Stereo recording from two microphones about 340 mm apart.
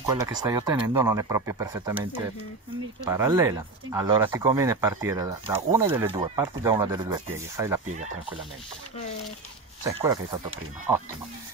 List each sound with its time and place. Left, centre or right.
0.0 s speech: centre
7.9 s speech: centre
9.8 s speech: centre